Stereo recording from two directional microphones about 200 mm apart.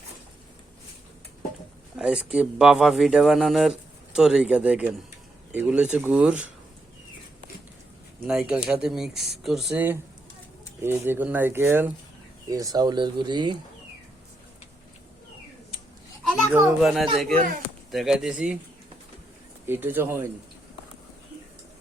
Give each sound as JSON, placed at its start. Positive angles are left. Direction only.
{"t": 2.0, "sound": "speech", "side_deg": -5}
{"t": 8.3, "sound": "speech", "side_deg": -5}
{"t": 16.2, "sound": "children playing", "side_deg": 5}
{"t": 16.8, "sound": "speech", "side_deg": 0}
{"t": 19.6, "sound": "speech", "side_deg": -10}